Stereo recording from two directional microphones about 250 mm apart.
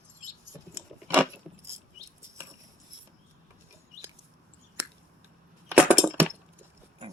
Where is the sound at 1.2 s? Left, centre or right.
Centre.